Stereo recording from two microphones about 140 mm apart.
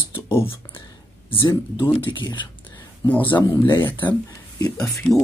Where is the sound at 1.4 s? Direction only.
30° left (ahead or behind).